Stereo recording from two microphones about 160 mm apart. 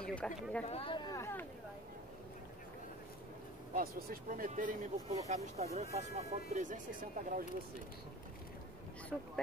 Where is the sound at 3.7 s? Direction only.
65° right (ahead or behind).